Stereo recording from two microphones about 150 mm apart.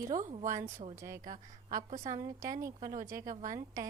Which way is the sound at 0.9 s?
20° right (ahead or behind).